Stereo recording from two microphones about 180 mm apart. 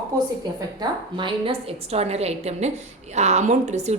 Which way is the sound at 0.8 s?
25° right (ahead or behind).